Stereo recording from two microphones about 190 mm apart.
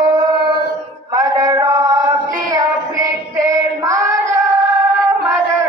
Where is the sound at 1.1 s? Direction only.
20° right (ahead or behind).